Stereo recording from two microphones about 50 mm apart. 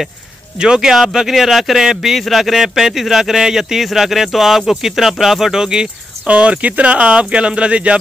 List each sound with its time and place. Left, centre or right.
0.6 s speech: centre
6.3 s speech: right